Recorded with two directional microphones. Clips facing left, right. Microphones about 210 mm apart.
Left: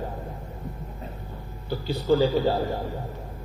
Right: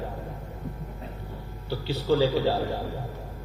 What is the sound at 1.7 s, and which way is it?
Speech, 45° left (ahead or behind).